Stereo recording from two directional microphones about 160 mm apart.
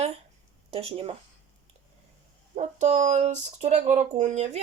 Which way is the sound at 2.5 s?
50° right (ahead or behind).